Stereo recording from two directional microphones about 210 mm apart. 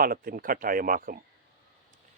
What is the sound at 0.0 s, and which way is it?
Speech, 45° right (ahead or behind).